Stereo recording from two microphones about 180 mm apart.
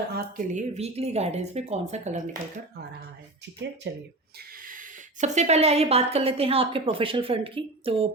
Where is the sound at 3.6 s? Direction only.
80° right.